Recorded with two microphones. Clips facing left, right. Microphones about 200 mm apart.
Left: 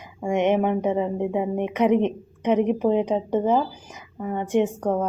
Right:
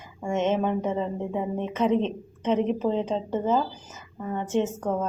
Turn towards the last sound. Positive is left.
turn(degrees=15)  # may be behind; listen again after turning